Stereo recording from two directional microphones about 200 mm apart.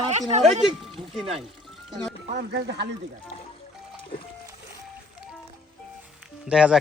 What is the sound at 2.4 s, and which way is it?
Speech, 55° right (ahead or behind).